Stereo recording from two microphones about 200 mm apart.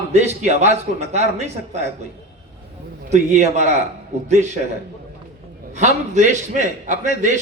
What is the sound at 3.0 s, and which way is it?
Speech, 35° right (ahead or behind).